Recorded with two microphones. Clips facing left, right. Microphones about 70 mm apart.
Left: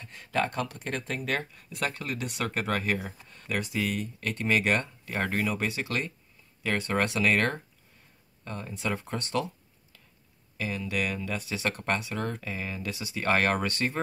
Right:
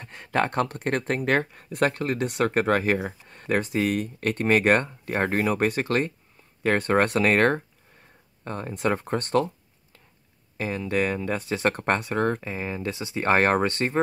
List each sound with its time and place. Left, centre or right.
0.0 s a sound: right
0.8 s speech: right
10.6 s speech: right
12.4 s speech: right